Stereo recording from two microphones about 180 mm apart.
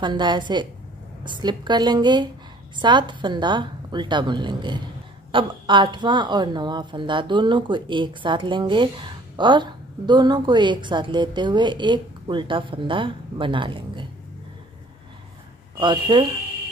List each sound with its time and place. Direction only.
0.0 s speech: 25° right (ahead or behind)
15.8 s speech: 25° right (ahead or behind)